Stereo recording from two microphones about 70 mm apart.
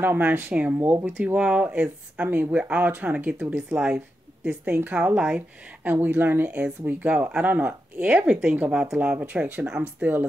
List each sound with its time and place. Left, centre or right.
0.0 s speech: right
5.9 s speech: right